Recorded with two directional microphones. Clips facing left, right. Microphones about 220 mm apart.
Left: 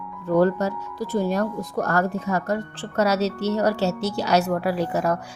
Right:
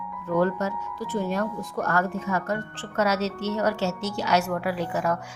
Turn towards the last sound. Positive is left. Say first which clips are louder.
# left 4 dB
turn(degrees=35)  # may be behind; listen again after turning